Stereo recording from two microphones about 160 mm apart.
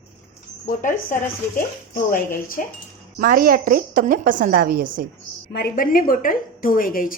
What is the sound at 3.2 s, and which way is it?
A woman's voice, 65° right (ahead or behind).